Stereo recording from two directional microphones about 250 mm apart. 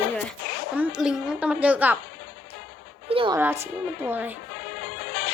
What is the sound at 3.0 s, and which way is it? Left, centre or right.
Speech, right.